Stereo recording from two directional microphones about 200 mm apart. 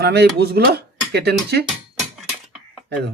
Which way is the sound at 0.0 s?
55° right (ahead or behind).